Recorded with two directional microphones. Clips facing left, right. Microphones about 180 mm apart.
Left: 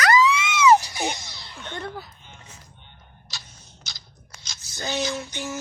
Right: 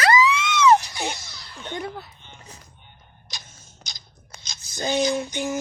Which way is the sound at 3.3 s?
15° right (ahead or behind).